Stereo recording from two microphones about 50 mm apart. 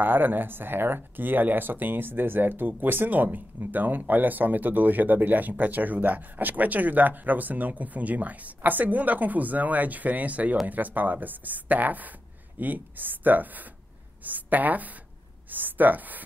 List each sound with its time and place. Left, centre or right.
0.0 s speech: right